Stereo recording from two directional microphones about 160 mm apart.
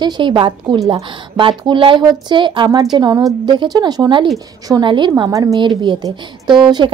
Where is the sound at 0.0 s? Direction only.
30° right (ahead or behind).